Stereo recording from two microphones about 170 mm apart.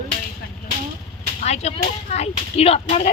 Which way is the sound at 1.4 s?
40° left (ahead or behind).